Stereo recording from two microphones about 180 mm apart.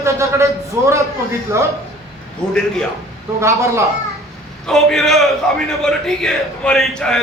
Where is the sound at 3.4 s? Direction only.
15° right (ahead or behind).